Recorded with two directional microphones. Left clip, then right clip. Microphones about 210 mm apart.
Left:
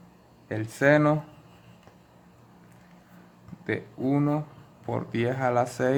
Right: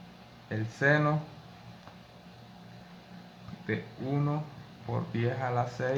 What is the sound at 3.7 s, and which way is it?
Speech, 50° left (ahead or behind).